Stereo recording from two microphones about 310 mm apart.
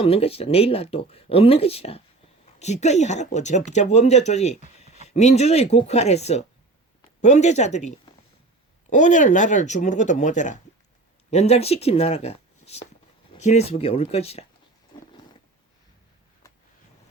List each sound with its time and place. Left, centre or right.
0.0 s speech: centre